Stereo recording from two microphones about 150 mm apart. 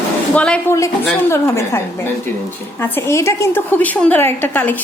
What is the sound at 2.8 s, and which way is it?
A woman's voice, 15° left (ahead or behind).